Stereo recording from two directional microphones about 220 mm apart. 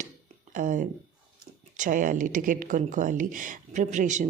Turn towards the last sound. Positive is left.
turn(degrees=-35)  # may be behind; listen again after turning